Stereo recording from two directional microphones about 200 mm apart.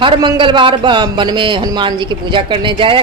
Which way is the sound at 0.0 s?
25° right (ahead or behind).